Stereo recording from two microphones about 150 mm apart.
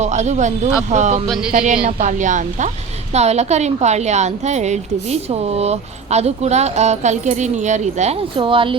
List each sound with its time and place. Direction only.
0.0 s a woman's voice: 50° right (ahead or behind)
1.3 s speech: 5° right (ahead or behind)
1.8 s a woman's voice: 55° right (ahead or behind)
8.4 s speech: 35° right (ahead or behind)